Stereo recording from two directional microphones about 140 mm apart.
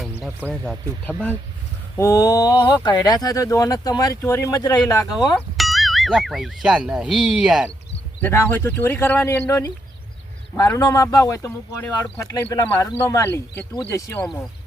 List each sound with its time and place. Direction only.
0.0 s a sound: 10° right (ahead or behind)
0.6 s speech: 5° left (ahead or behind)
2.0 s speech: 20° left (ahead or behind)
5.5 s speech: centre (ahead or behind)
8.2 s speech: 15° left (ahead or behind)